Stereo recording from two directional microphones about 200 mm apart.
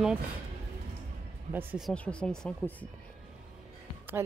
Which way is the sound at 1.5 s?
10° right (ahead or behind).